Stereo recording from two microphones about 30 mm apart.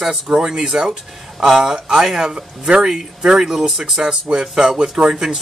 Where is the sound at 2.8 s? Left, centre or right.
Right.